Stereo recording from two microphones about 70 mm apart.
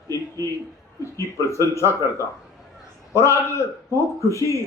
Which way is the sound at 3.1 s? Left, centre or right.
Left.